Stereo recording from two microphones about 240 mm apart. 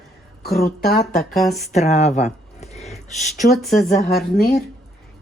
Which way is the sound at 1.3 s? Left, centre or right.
Centre.